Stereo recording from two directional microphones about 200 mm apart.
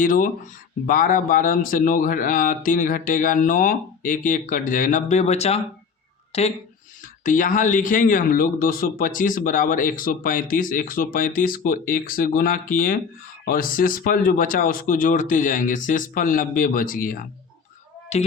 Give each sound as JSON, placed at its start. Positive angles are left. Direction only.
{"t": 0.0, "sound": "speech", "side_deg": 40}